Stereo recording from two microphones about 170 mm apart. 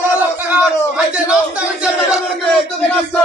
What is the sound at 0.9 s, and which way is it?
A man's voice, 5° right (ahead or behind).